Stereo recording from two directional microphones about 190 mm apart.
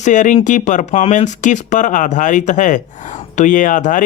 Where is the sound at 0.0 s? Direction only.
40° left (ahead or behind).